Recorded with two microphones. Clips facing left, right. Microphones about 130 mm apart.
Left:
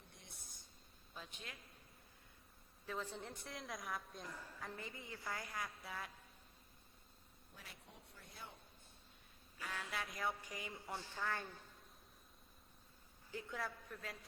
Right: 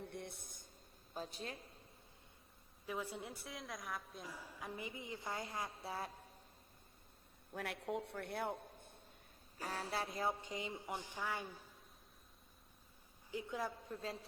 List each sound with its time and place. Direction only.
0.0 s a sound: 60° right (ahead or behind)
1.1 s a woman's voice: 35° right (ahead or behind)
2.8 s a woman's voice: 10° right (ahead or behind); by 6.2 s 35° right (ahead or behind)
7.5 s a man's voice: 70° right (ahead or behind)
9.6 s speech: 35° right (ahead or behind); by 11.7 s 10° right (ahead or behind)
13.3 s speech: 20° right (ahead or behind)